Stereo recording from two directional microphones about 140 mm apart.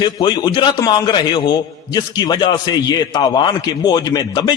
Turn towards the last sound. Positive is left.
turn(degrees=30)  # may be behind; listen again after turning